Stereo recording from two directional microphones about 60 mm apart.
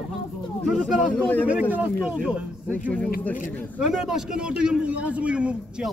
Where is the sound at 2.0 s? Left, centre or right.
Centre.